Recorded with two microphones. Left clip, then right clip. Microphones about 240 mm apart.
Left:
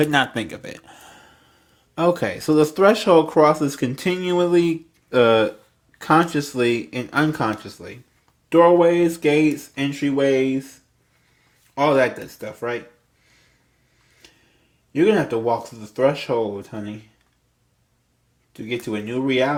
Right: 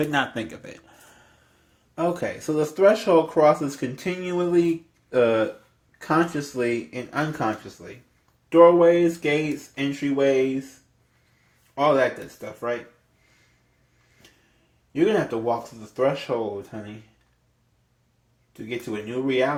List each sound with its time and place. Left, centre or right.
0.0 s speech: left
2.0 s speech: left
11.7 s speech: left
14.9 s speech: left
18.5 s speech: left